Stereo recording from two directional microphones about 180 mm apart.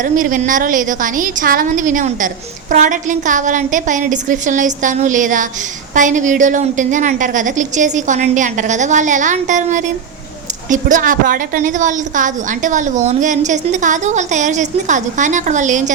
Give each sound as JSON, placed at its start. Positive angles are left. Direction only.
{"t": 0.0, "sound": "a woman's voice", "side_deg": -45}